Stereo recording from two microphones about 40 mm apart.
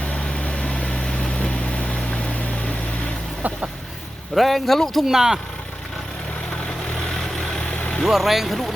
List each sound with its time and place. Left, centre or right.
0.3 s vehicle: left
4.4 s speech: centre
5.0 s speech: centre
6.9 s vehicle: centre
8.0 s speech: centre